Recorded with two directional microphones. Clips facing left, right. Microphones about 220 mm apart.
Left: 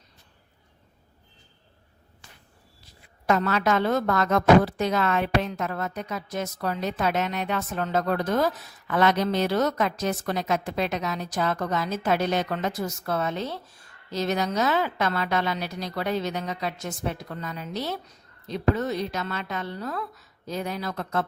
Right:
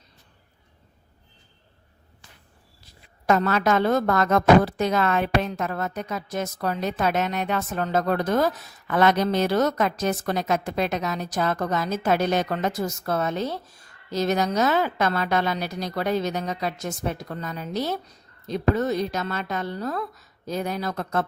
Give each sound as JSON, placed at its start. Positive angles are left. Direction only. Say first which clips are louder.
{"t": 3.2, "sound": "a woman's voice", "louder": "right 2 dB", "side_deg": -40}